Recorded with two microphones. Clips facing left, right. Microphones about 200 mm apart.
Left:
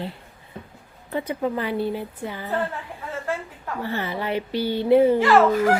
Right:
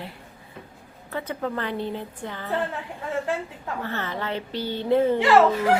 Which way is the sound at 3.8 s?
10° left (ahead or behind).